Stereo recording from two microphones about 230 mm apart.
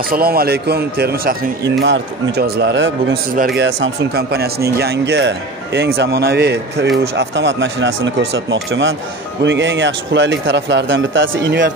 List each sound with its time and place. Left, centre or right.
0.1 s speech: right